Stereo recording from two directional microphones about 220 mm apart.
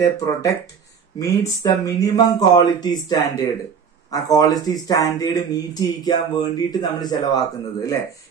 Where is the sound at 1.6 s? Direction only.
15° left (ahead or behind).